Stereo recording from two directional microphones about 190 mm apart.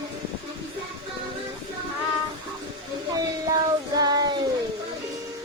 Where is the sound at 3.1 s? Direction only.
20° right (ahead or behind).